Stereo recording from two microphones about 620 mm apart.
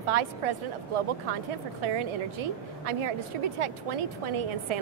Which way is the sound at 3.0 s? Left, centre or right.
Right.